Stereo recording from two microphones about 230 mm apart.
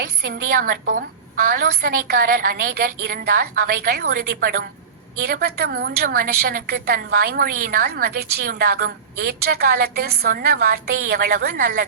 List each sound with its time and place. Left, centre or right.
0.3 s a woman's voice: right